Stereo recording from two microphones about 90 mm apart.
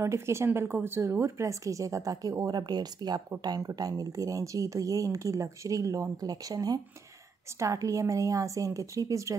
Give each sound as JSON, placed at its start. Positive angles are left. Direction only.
{"t": 0.0, "sound": "speech", "side_deg": -30}